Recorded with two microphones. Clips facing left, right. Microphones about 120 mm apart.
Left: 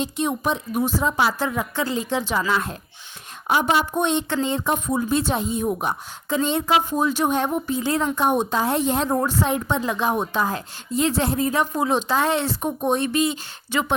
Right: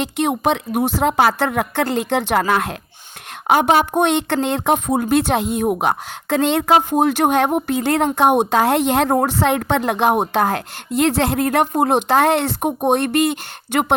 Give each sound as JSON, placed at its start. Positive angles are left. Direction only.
{"t": 0.0, "sound": "speech", "side_deg": -80}